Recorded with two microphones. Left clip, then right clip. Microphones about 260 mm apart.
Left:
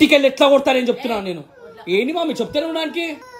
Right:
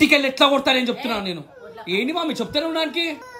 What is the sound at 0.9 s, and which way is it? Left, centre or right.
Speech, centre.